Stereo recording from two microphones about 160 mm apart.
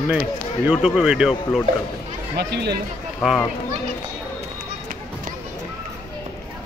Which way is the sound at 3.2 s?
Centre (ahead or behind).